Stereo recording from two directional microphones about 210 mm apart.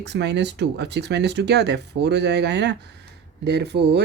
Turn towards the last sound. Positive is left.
turn(degrees=-55)  # may be behind; listen again after turning